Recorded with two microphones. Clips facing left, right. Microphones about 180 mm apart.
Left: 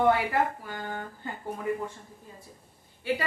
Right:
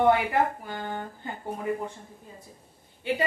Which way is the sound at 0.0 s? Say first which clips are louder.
Right 2 dB; 20° right (ahead or behind).